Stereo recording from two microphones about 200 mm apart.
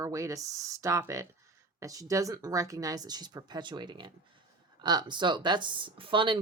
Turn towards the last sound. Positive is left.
turn(degrees=-25)  # may be behind; listen again after turning